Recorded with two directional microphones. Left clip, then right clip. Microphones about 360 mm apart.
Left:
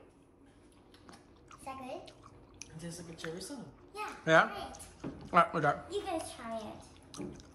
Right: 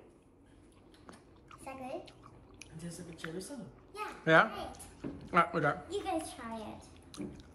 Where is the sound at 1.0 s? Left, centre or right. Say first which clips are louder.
Right 1 dB; centre.